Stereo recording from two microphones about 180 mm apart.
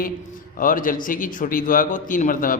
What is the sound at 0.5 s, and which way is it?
A man's voice, 50° left (ahead or behind).